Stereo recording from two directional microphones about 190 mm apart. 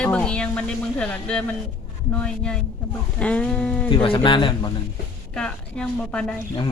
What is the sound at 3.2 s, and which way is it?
Speech, 5° left (ahead or behind).